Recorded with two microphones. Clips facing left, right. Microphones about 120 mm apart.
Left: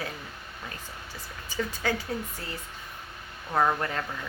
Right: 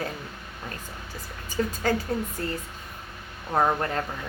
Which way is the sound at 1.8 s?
45° right (ahead or behind).